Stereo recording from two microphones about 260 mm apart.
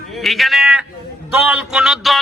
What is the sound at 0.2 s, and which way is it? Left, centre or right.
A man's voice, centre.